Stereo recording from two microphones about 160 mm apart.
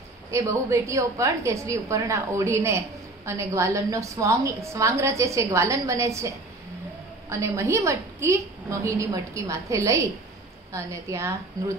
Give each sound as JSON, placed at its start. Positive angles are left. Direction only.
{"t": 0.3, "sound": "a woman's voice", "side_deg": -20}